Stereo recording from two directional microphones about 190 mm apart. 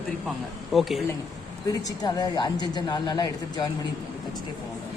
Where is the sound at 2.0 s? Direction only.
20° left (ahead or behind).